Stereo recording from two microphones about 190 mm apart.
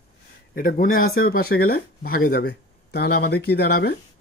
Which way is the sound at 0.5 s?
45° left (ahead or behind).